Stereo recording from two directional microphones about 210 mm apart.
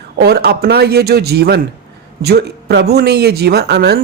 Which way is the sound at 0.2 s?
50° right (ahead or behind).